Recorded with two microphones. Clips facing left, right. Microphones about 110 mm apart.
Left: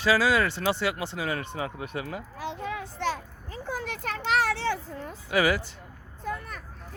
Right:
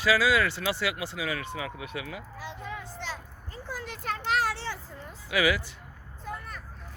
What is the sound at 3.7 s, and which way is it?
Children playing, 65° left (ahead or behind).